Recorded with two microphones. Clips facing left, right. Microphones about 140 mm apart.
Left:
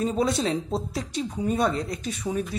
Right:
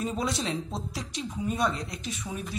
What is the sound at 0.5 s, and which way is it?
Speech, 30° left (ahead or behind).